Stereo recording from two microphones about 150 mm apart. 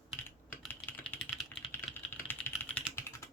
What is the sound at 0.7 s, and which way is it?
Typing, 15° left (ahead or behind).